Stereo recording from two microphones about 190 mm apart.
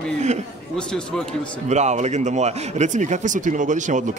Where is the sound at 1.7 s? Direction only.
35° right (ahead or behind).